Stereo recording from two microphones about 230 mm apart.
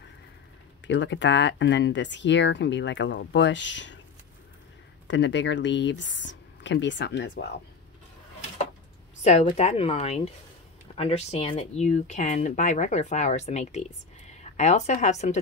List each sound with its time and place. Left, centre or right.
0.8 s speech: left
5.0 s speech: left
9.2 s a woman's voice: left